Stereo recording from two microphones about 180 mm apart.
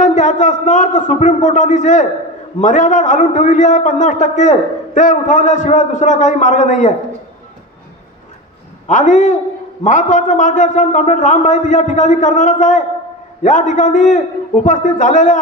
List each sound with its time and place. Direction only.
0.0 s a man's voice: 45° left (ahead or behind)
8.8 s a man's voice: 45° left (ahead or behind)